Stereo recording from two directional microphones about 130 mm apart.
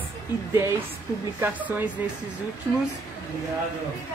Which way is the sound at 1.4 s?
15° right (ahead or behind).